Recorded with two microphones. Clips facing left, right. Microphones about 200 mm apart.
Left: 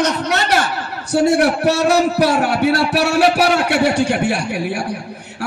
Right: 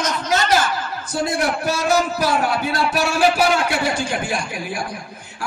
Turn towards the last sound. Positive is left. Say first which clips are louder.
# left 5 dB
turn(degrees=70)  # may be behind; listen again after turning